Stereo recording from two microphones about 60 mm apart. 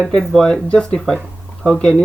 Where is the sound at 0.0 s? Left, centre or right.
Centre.